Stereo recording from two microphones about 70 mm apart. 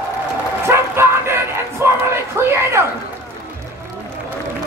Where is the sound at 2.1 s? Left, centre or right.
Right.